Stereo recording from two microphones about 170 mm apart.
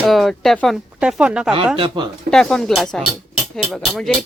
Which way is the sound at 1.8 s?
25° right (ahead or behind).